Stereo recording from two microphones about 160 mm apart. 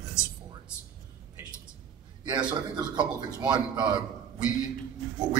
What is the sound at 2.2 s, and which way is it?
A man's voice, 30° right (ahead or behind).